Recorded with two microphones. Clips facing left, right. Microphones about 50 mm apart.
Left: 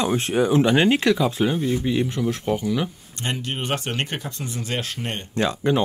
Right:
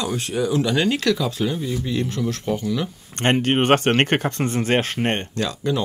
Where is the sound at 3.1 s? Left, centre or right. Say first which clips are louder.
Right 10 dB; right.